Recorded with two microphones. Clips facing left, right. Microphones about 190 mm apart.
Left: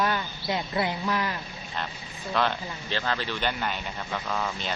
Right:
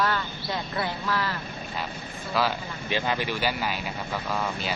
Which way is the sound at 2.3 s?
5° right (ahead or behind).